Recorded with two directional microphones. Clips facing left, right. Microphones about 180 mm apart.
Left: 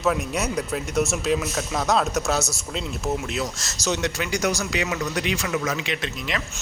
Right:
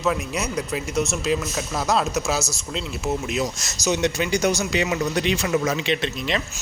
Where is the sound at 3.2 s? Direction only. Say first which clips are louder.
Right 3 dB; 15° right (ahead or behind).